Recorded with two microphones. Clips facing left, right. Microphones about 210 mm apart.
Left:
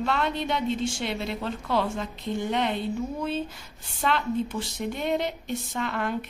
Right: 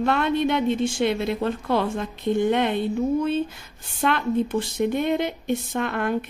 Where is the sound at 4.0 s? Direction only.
55° right (ahead or behind).